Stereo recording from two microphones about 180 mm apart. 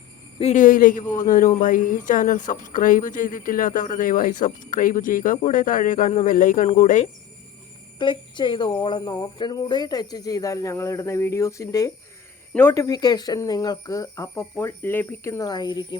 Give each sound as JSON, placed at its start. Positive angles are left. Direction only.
{"t": 0.3, "sound": "speech", "side_deg": 40}
{"t": 7.9, "sound": "speech", "side_deg": 25}